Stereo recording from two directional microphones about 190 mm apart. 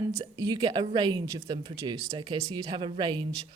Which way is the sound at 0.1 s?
20° right (ahead or behind).